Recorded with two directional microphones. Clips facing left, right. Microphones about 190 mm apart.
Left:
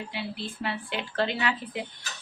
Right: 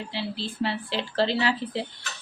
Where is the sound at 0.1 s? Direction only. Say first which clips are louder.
Right 3 dB; 30° right (ahead or behind).